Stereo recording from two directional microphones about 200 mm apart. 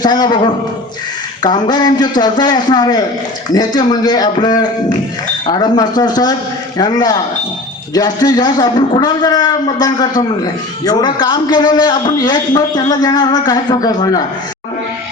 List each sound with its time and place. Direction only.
0.0 s a man's voice: 20° left (ahead or behind)